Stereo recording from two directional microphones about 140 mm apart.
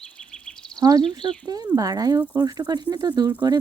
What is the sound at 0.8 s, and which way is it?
Speech, 25° right (ahead or behind).